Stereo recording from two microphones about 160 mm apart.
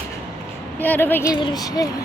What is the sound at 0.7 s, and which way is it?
Speech, 10° left (ahead or behind).